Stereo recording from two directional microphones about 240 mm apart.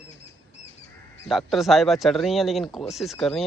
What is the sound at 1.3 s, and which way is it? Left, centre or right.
Speech, centre.